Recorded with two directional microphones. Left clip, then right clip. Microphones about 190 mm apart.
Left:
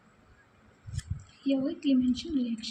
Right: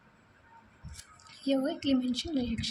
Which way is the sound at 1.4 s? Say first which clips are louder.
Even; 35° right (ahead or behind).